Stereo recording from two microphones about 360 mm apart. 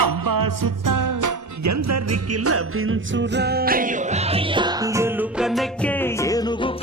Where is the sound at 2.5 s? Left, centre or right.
Right.